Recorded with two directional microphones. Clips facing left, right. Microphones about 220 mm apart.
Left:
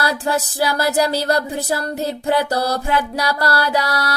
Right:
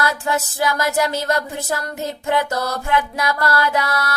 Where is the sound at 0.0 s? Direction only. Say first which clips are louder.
Left 1 dB; 35° left (ahead or behind).